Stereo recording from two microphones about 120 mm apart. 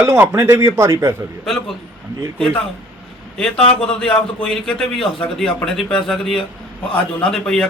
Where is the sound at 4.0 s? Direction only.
5° left (ahead or behind).